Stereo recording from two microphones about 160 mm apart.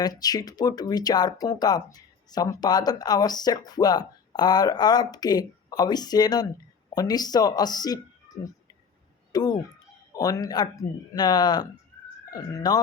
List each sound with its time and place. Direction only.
0.0 s speech: 25° left (ahead or behind)
8.3 s whispering: 20° left (ahead or behind)
9.3 s speech: 25° left (ahead or behind)